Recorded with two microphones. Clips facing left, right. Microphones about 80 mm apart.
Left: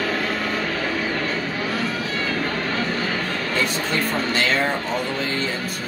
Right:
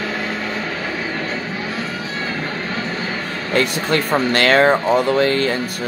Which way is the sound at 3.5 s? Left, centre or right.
Right.